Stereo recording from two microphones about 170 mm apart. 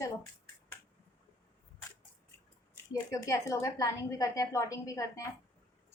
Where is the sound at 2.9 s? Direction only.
20° left (ahead or behind).